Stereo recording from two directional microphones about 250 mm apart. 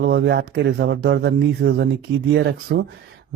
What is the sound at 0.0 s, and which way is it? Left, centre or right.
Speech, right.